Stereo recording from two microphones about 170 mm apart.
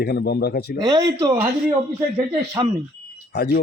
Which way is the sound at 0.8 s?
20° right (ahead or behind).